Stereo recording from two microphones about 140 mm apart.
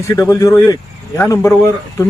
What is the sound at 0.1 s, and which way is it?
Speech, 25° left (ahead or behind).